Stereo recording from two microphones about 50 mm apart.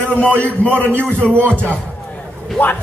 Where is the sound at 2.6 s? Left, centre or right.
Left.